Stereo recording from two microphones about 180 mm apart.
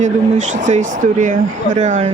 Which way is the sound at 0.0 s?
45° right (ahead or behind).